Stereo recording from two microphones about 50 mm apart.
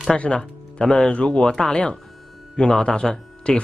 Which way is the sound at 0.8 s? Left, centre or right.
Centre.